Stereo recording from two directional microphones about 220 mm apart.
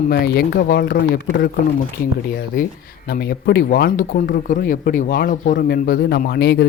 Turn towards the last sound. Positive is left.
turn(degrees=45)  # may be behind; listen again after turning